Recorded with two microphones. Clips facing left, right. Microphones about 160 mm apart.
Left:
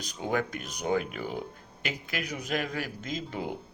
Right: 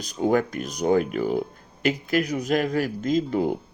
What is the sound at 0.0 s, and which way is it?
A man's voice, 45° right (ahead or behind).